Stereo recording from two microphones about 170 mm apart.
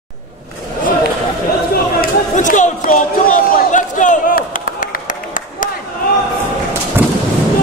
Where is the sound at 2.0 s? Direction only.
50° left (ahead or behind).